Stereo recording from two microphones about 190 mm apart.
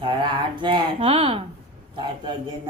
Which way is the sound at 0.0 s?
25° right (ahead or behind).